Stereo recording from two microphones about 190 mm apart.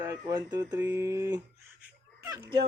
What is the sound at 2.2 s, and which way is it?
Fowl, 20° right (ahead or behind).